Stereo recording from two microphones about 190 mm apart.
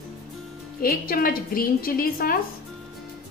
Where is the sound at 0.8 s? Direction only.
50° left (ahead or behind).